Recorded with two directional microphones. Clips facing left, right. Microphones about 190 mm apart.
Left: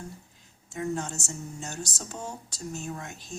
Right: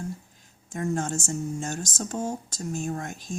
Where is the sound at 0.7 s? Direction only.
50° right (ahead or behind).